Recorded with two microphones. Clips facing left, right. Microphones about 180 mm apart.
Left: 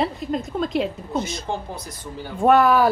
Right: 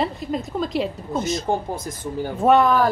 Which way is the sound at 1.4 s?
50° right (ahead or behind).